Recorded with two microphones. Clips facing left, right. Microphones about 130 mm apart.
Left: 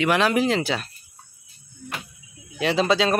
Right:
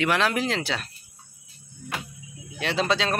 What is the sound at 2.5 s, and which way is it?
Speech, centre (ahead or behind).